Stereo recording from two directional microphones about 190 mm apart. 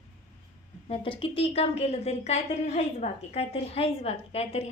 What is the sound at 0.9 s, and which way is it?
A woman's voice, 30° left (ahead or behind).